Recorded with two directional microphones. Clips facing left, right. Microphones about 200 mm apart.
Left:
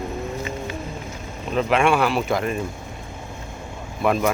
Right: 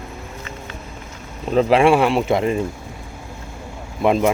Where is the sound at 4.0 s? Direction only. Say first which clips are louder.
Right 4 dB; 25° right (ahead or behind).